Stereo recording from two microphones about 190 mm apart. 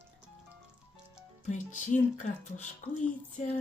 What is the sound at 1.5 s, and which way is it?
Speech, 40° left (ahead or behind).